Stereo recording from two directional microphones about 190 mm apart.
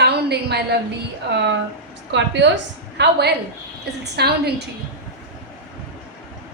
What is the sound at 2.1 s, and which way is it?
A woman's voice, 70° right (ahead or behind).